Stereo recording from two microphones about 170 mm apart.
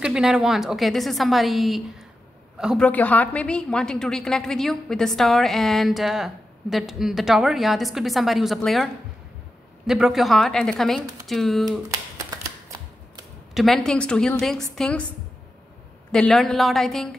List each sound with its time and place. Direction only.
0.0 s a woman's voice: 5° right (ahead or behind)
12.3 s typewriter: 20° right (ahead or behind)
13.6 s a woman's voice: 5° left (ahead or behind)
16.1 s a woman's voice: 5° left (ahead or behind)